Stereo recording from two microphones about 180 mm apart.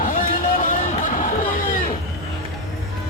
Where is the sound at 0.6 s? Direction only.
45° left (ahead or behind).